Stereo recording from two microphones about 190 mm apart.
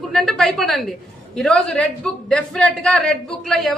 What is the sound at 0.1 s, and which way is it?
A woman's voice, centre (ahead or behind).